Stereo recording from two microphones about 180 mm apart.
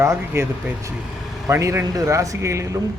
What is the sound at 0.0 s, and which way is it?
A man's voice, 15° right (ahead or behind).